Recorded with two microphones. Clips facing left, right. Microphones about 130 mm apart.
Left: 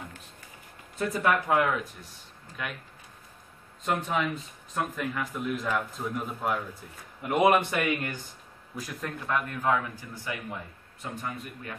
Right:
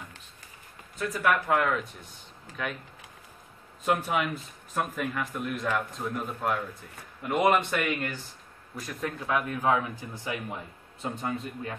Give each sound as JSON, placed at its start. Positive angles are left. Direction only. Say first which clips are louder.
{"t": 0.9, "sound": "speech", "louder": "left 1 dB", "side_deg": 30}
{"t": 1.5, "sound": "speech", "louder": "left 1 dB", "side_deg": 10}
{"t": 3.8, "sound": "speech", "louder": "right 1 dB", "side_deg": -5}
{"t": 9.0, "sound": "a man's voice", "louder": "right 2 dB", "side_deg": -10}